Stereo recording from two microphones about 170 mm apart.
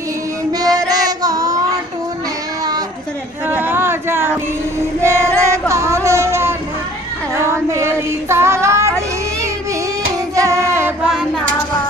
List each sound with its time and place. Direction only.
0.5 s child singing: 20° right (ahead or behind)
3.4 s a sound: 10° right (ahead or behind)
5.0 s child singing: 15° right (ahead or behind)
7.4 s female singing: 15° right (ahead or behind)
10.3 s female singing: 20° right (ahead or behind)
11.0 s a sound: 5° right (ahead or behind)